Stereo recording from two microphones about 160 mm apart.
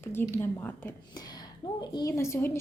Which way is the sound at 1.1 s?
25° left (ahead or behind).